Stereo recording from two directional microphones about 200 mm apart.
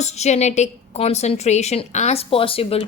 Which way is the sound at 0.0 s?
35° left (ahead or behind).